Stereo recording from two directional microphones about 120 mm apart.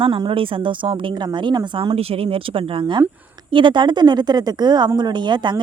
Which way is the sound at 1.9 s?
55° right (ahead or behind).